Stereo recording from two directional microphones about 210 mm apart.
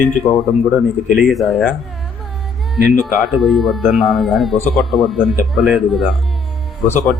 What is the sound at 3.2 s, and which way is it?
Speech, centre (ahead or behind).